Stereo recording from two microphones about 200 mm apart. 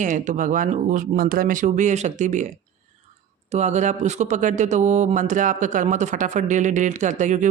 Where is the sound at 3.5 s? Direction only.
35° right (ahead or behind).